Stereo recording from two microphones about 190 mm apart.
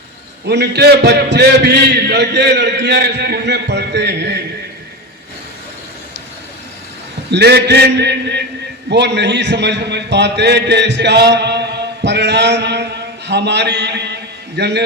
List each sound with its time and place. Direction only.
0.4 s a man's voice: 65° right (ahead or behind)
7.3 s a man's voice: 60° right (ahead or behind)